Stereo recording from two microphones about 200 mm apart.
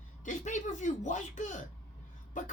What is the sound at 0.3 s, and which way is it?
Speech, 40° left (ahead or behind).